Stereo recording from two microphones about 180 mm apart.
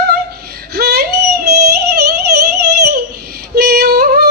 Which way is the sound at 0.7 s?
60° right (ahead or behind).